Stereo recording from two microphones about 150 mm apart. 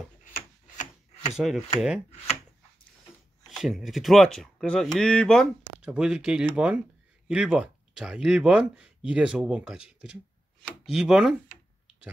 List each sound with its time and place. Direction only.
0.2 s tick-tock: 65° left (ahead or behind)
1.3 s speech: centre (ahead or behind)
3.4 s speech: centre (ahead or behind)
10.6 s chopping: centre (ahead or behind)